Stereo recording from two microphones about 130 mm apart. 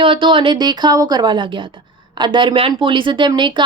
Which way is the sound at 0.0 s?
40° right (ahead or behind).